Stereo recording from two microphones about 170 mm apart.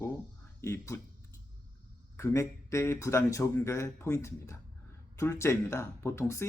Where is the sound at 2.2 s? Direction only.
15° left (ahead or behind).